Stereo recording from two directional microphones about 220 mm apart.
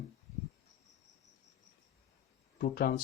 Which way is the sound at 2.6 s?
40° left (ahead or behind).